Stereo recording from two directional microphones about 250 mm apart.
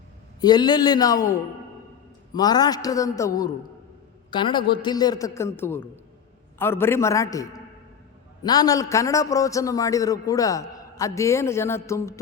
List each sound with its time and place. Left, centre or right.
0.4 s a man's voice: centre